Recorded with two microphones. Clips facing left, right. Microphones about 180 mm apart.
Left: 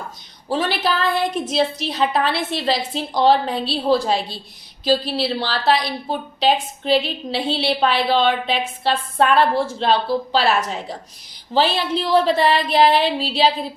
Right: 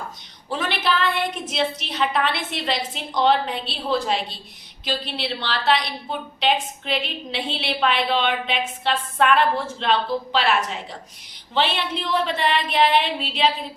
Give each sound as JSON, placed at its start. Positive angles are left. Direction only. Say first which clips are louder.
{"t": 0.4, "sound": "a woman's voice", "louder": "left 4 dB", "side_deg": 35}